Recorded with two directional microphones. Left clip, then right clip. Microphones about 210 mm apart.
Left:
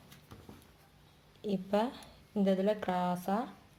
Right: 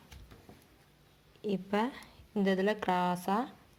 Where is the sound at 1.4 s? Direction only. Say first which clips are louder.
Even; 20° right (ahead or behind).